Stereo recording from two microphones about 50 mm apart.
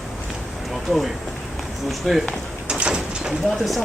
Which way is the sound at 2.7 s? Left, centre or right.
Centre.